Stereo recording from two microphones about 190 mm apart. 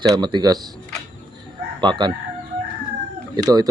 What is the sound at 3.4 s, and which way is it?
Speech, 20° right (ahead or behind).